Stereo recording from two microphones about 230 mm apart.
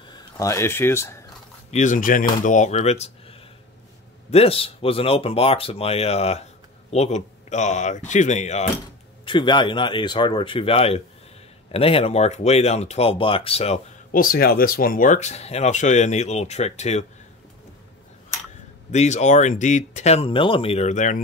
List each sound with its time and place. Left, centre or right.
0.1 s speech: centre
1.7 s speech: left
14.2 s speech: left
18.9 s speech: left